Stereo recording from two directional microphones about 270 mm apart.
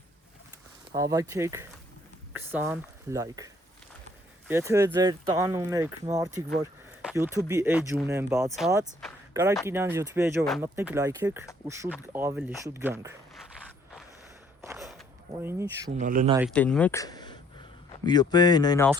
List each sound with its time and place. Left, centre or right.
1.1 s speech: centre
10.4 s speech: centre
10.8 s speech: centre
14.6 s a sound: centre
15.9 s speech: right
16.5 s speech: centre